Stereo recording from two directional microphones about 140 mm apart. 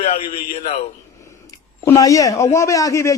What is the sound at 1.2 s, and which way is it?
Speech, 20° left (ahead or behind).